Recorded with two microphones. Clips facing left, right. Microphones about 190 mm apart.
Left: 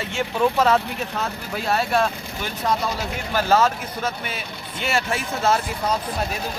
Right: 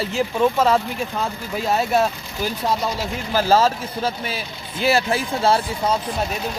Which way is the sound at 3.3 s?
30° right (ahead or behind).